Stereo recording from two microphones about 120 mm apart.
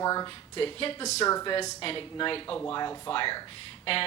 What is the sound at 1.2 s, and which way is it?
Speech, 30° left (ahead or behind).